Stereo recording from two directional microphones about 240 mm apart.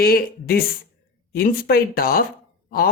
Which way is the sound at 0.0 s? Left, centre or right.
Left.